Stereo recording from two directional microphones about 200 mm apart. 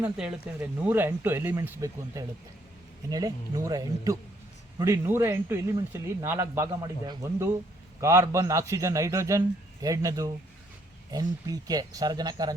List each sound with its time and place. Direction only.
0.0 s speech: 5° right (ahead or behind)